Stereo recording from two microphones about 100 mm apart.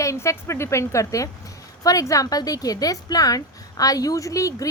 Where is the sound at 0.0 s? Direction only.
30° left (ahead or behind).